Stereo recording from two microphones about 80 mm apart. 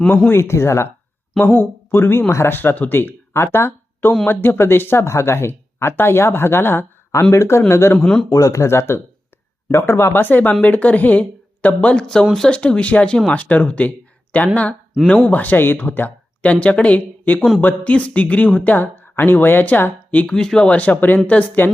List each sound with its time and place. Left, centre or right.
0.3 s speech: left
7.9 s speech: centre
8.3 s speech: left; by 12.0 s centre
12.2 s speech: centre
12.5 s speech: centre